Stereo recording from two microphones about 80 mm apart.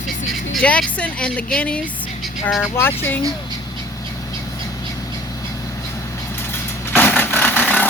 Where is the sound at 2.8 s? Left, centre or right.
Left.